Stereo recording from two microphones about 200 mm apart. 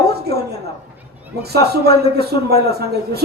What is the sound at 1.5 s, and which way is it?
A man's voice, 55° right (ahead or behind).